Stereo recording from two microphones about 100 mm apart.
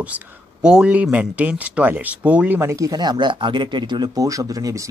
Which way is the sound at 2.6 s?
30° right (ahead or behind).